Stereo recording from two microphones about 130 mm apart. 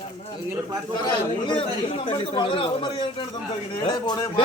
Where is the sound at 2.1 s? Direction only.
40° left (ahead or behind).